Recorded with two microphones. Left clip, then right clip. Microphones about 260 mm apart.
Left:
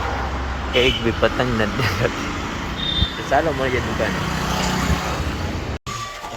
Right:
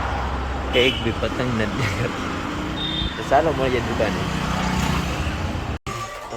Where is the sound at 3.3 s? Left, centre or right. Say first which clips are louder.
Right 1 dB; centre.